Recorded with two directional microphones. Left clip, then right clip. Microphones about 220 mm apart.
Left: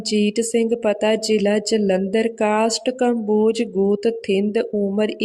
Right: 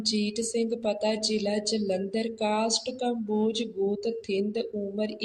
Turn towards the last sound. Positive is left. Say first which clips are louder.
# left 10 dB
turn(degrees=40)  # may be behind; listen again after turning